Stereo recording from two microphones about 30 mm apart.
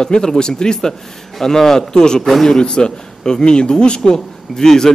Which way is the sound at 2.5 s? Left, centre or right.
Left.